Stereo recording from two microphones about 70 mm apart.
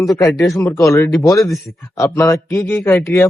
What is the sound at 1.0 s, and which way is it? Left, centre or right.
Speech, left.